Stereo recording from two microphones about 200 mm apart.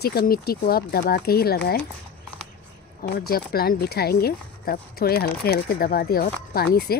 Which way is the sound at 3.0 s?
50° left (ahead or behind).